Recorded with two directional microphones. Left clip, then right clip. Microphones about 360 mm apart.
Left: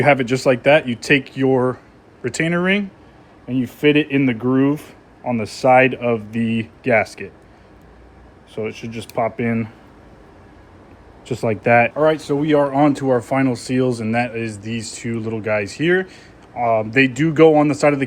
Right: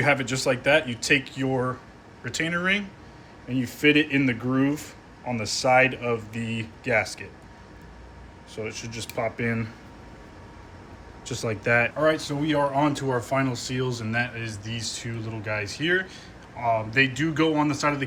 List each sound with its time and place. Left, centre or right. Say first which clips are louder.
0.0 s speech: left 8 dB; left
9.1 s speech: left 7 dB; centre
11.3 s speech: left 8 dB; centre